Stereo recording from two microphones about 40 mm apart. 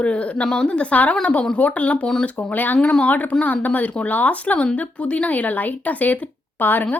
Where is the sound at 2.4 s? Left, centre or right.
Left.